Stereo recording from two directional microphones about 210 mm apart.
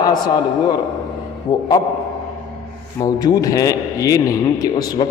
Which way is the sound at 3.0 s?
15° left (ahead or behind).